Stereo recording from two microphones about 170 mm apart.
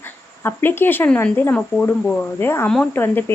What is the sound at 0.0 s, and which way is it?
Speech, 10° left (ahead or behind).